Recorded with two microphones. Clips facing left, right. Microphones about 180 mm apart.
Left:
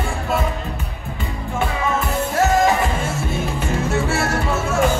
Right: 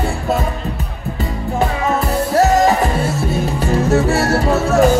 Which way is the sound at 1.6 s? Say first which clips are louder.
Right 4 dB; 40° right (ahead or behind).